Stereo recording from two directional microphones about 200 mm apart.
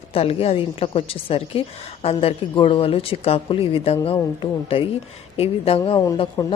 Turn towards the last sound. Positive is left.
turn(degrees=20)  # may be behind; listen again after turning